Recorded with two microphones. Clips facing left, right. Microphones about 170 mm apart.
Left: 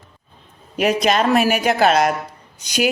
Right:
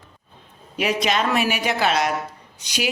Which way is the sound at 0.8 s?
45° left (ahead or behind).